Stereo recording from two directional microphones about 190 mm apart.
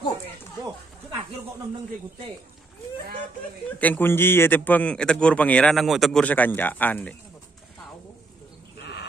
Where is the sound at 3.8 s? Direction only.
10° left (ahead or behind).